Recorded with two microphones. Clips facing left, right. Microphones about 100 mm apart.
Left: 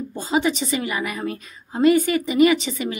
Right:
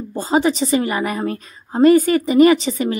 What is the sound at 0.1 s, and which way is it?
A woman's voice, 40° right (ahead or behind).